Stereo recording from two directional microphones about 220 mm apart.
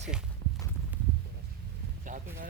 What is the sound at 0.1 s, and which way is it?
Walk, 5° right (ahead or behind).